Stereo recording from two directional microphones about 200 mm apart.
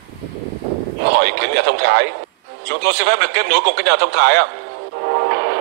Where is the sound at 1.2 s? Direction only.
60° right (ahead or behind).